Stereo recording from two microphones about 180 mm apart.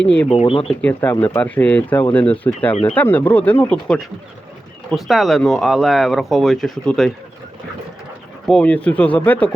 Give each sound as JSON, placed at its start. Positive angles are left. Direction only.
{"t": 0.0, "sound": "speech", "side_deg": 5}
{"t": 0.3, "sound": "speech", "side_deg": 30}
{"t": 0.7, "sound": "speech", "side_deg": 5}
{"t": 8.4, "sound": "speech", "side_deg": 5}